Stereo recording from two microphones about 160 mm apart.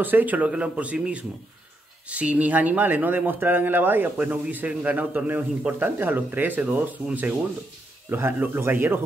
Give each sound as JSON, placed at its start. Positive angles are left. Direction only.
{"t": 0.0, "sound": "speech", "side_deg": -10}